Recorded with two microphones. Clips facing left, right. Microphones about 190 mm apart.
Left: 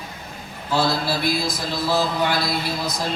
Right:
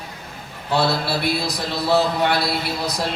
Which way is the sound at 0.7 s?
65° right (ahead or behind).